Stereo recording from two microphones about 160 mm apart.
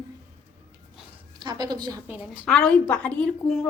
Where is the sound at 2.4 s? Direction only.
5° left (ahead or behind).